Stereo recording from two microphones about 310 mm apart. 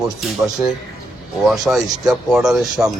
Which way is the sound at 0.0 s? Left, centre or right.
Centre.